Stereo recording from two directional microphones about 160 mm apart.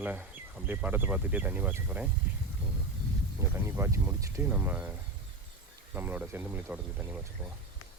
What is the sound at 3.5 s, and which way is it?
Speech, 15° right (ahead or behind).